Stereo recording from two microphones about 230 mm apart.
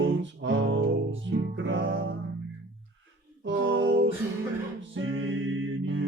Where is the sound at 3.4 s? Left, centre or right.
Right.